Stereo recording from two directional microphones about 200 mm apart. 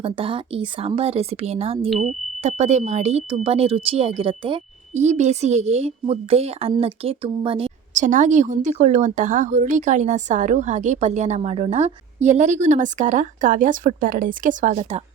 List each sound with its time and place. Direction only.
0.0 s a woman's voice: 25° right (ahead or behind)